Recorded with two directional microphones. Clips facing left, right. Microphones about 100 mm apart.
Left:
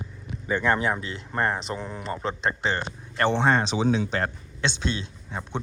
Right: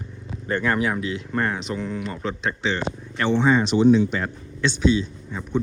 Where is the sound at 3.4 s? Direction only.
90° left.